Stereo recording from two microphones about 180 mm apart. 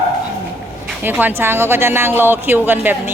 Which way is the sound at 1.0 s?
10° right (ahead or behind).